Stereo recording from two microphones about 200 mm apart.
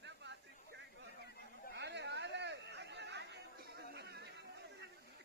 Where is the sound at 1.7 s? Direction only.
60° right (ahead or behind).